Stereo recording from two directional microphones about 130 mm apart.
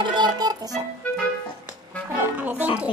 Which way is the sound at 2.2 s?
15° right (ahead or behind).